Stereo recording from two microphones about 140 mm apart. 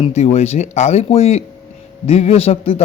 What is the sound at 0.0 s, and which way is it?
A man's voice, 50° left (ahead or behind).